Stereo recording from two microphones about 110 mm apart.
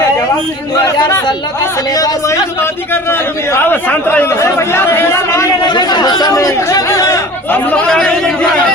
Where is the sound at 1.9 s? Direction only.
35° left (ahead or behind).